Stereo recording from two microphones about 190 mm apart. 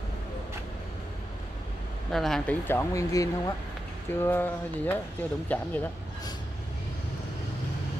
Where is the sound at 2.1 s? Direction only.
Centre (ahead or behind).